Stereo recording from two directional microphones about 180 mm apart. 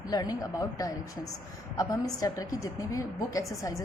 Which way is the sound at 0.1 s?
20° left (ahead or behind).